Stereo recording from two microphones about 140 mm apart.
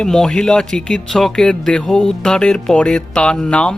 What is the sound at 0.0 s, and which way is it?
Speech, 5° left (ahead or behind).